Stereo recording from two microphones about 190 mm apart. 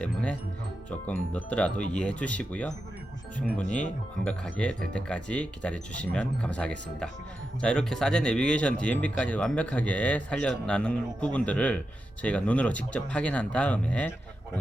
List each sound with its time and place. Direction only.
0.0 s speech: 5° left (ahead or behind)
4.3 s speech: 5° left (ahead or behind)